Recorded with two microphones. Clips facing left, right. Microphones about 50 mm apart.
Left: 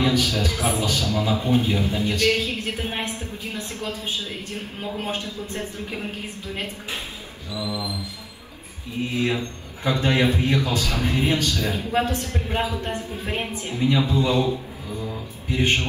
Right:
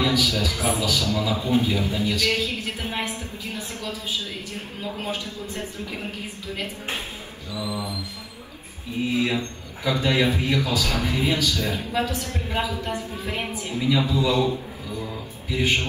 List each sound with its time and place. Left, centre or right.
0.0 s a man's voice: left
5.0 s a man's voice: left
7.5 s mantra: right
9.8 s a man's voice: left
10.8 s a man's voice: right
11.1 s a man's voice: left
15.5 s a man's voice: left